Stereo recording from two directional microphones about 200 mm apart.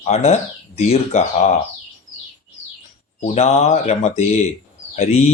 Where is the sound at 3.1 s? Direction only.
35° left (ahead or behind).